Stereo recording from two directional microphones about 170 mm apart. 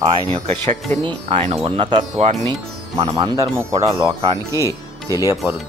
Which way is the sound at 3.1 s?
25° right (ahead or behind).